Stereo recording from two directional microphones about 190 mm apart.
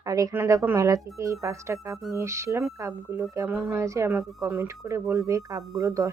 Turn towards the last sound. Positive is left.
turn(degrees=-15)  # may be behind; listen again after turning